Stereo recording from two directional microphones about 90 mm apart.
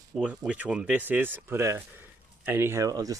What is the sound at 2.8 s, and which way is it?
Speech, 40° right (ahead or behind).